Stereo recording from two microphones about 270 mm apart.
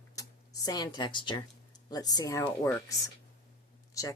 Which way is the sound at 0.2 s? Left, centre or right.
Centre.